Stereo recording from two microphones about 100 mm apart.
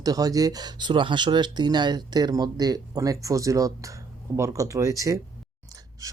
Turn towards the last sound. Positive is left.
turn(degrees=-35)  # may be behind; listen again after turning